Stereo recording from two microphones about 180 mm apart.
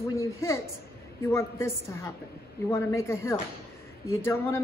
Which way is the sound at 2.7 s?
15° left (ahead or behind).